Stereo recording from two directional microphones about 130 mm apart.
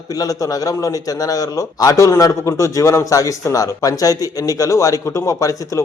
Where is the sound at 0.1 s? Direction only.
25° left (ahead or behind).